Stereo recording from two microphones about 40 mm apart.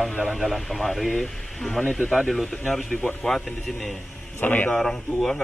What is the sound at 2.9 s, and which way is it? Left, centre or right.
Speech, centre.